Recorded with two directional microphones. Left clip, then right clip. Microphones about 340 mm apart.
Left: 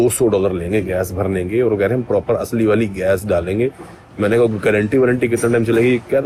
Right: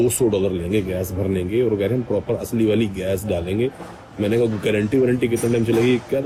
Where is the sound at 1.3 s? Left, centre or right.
Centre.